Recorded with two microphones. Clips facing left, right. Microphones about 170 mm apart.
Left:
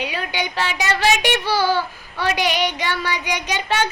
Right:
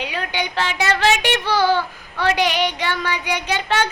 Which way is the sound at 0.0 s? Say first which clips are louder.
Even; 10° left (ahead or behind).